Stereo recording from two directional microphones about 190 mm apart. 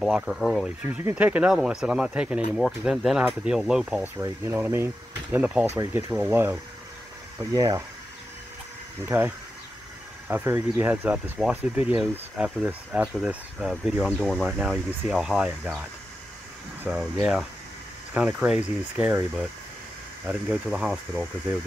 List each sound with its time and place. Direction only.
0.0 s speech: 5° right (ahead or behind)
7.5 s speech: 20° right (ahead or behind)
10.2 s speech: 10° right (ahead or behind)
16.8 s speech: 5° right (ahead or behind)